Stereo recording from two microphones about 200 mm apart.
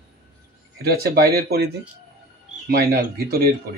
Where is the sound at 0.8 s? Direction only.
55° right (ahead or behind).